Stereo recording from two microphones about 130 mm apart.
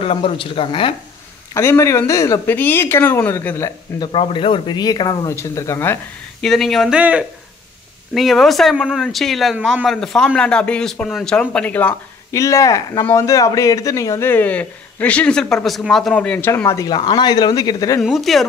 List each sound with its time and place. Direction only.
0.0 s speech: 45° left (ahead or behind)
1.5 s a man's voice: 20° left (ahead or behind)
4.0 s speech: 40° left (ahead or behind); by 5.9 s 20° left (ahead or behind)
6.4 s speech: centre (ahead or behind)
7.0 s speech: 10° right (ahead or behind); by 11.9 s 10° left (ahead or behind)
12.3 s a man's voice: 25° left (ahead or behind)
18.0 s speech: centre (ahead or behind)